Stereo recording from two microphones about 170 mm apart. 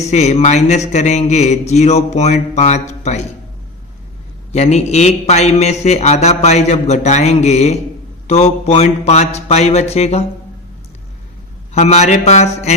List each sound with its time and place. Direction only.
0.1 s speech: 40° left (ahead or behind)
4.5 s speech: 40° left (ahead or behind)
11.7 s speech: 40° left (ahead or behind)